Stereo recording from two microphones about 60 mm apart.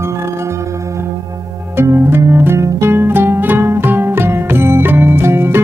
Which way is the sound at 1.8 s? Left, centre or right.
Right.